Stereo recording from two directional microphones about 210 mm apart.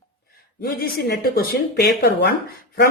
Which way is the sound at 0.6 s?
45° left (ahead or behind).